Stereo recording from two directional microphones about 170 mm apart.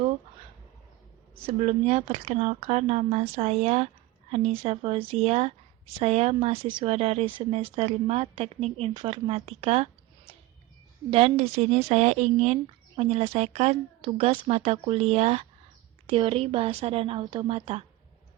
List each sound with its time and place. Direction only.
1.5 s speech: 35° right (ahead or behind)
11.1 s speech: 35° right (ahead or behind)